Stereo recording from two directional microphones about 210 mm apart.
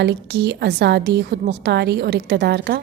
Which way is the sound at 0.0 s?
55° right (ahead or behind).